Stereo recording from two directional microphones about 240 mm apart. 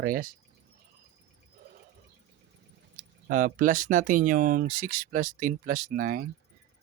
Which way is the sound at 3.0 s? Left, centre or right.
Right.